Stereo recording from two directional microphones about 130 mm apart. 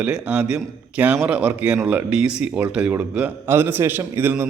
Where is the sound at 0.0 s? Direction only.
10° right (ahead or behind).